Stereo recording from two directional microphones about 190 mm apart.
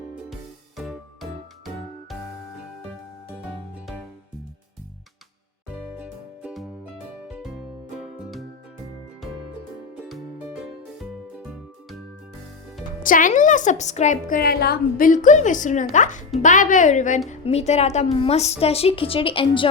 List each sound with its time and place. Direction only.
0.8 s music: centre (ahead or behind)
6.0 s music: 5° right (ahead or behind)
10.1 s music: centre (ahead or behind)
13.0 s a woman's voice: 45° left (ahead or behind); by 19.7 s 30° left (ahead or behind)